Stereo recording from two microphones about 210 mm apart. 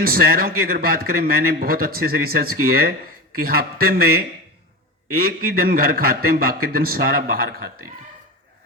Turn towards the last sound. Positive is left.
turn(degrees=-45)  # may be behind; listen again after turning